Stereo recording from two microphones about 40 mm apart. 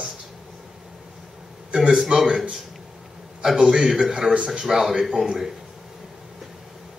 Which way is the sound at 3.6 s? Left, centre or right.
Centre.